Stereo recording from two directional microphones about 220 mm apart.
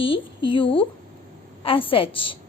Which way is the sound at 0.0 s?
25° left (ahead or behind).